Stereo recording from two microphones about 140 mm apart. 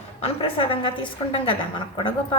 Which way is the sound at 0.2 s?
40° left (ahead or behind).